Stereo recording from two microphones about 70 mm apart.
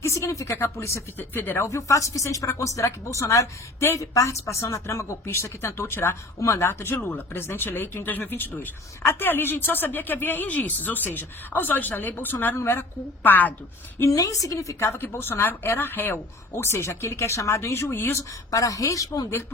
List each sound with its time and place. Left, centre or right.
0.0 s speech: left
1.2 s speech: left
1.6 s speech: left
6.9 s speech: left
14.1 s speech: left
14.8 s speech: left
18.2 s a woman's voice: left